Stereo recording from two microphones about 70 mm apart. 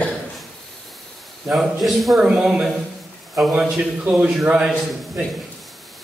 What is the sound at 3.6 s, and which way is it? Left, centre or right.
A man's voice, centre.